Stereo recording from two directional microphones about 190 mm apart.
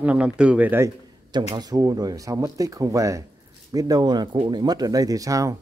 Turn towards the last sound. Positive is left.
turn(degrees=-15)  # may be behind; listen again after turning